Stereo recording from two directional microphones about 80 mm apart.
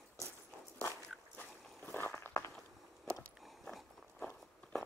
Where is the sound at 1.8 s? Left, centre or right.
Left.